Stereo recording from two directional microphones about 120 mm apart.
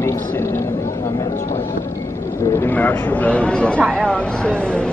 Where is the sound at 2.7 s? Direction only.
15° left (ahead or behind).